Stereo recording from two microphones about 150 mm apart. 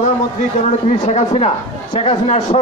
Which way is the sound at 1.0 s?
45° left (ahead or behind).